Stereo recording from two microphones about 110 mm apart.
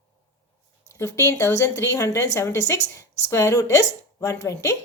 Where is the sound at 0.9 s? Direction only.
25° left (ahead or behind).